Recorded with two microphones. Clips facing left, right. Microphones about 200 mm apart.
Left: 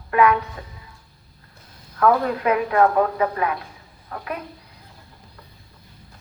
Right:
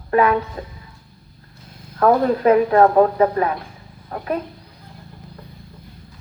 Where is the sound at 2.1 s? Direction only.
35° right (ahead or behind).